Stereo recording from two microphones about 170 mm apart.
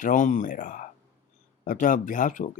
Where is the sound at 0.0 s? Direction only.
50° left (ahead or behind).